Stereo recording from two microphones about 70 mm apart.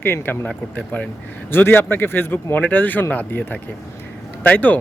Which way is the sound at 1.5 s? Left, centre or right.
Left.